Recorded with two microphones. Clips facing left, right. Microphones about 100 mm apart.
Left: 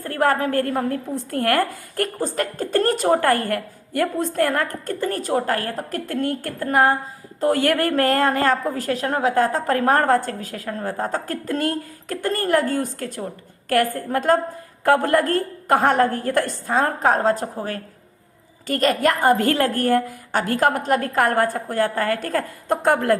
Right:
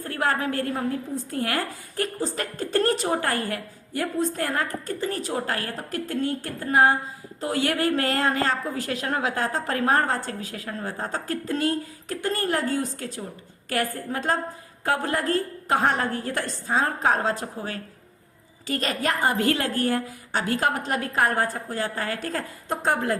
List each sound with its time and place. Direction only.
0.0 s a woman's voice: 45° left (ahead or behind)